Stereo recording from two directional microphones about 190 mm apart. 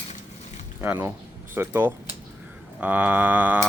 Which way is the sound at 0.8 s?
10° right (ahead or behind).